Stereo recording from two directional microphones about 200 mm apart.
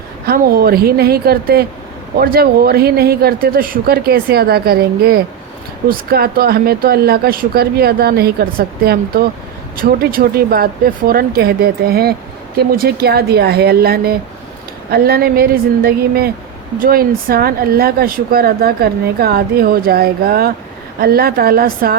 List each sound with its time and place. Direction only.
0.3 s speech: 50° right (ahead or behind)